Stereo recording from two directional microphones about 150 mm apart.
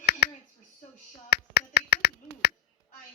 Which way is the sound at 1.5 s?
90° left.